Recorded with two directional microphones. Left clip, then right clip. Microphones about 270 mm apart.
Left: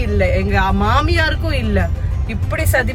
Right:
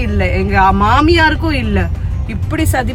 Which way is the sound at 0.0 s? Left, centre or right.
Centre.